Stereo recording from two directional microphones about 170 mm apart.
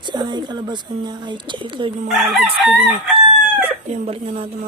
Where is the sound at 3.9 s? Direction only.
35° right (ahead or behind).